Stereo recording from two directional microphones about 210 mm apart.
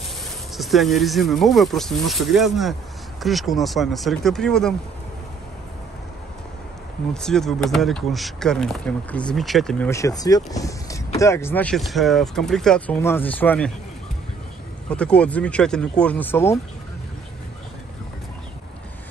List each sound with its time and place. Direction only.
0.6 s speech: centre (ahead or behind)
7.2 s speech: centre (ahead or behind)
9.8 s speech: 15° left (ahead or behind)
14.9 s speech: 5° left (ahead or behind)